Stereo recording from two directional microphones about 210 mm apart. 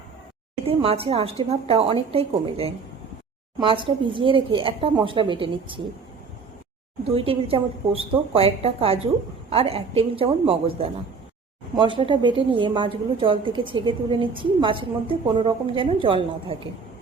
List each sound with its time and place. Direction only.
0.6 s a woman's voice: 25° right (ahead or behind)
7.1 s a woman's voice: 25° right (ahead or behind)